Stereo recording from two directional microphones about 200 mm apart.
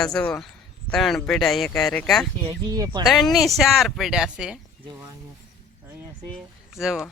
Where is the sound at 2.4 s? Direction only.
20° right (ahead or behind).